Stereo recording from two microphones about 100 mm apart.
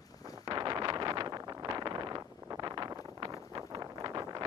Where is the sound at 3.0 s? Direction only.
35° right (ahead or behind).